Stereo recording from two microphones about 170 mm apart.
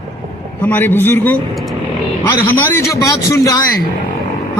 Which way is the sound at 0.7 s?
10° left (ahead or behind).